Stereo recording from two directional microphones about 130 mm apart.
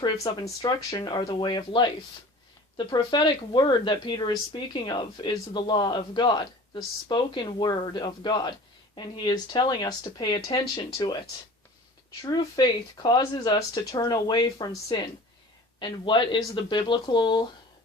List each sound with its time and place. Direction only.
0.0 s speech: 25° left (ahead or behind)
12.2 s speech: 35° left (ahead or behind)